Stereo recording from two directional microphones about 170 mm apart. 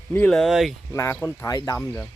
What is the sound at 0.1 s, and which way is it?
Speech, 5° left (ahead or behind).